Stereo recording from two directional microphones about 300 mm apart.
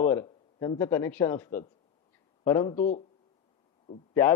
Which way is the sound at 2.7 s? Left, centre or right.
Left.